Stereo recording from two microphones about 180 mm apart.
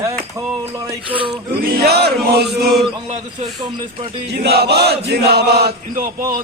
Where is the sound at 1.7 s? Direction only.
60° right (ahead or behind).